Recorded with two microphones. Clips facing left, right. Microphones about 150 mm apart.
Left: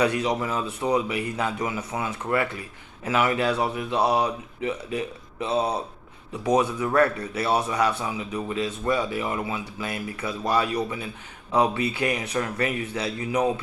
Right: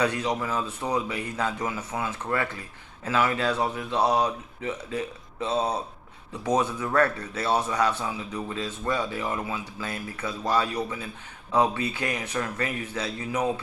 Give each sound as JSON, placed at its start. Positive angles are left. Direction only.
{"t": 0.0, "sound": "speech", "side_deg": 15}
{"t": 12.3, "sound": "speech", "side_deg": 25}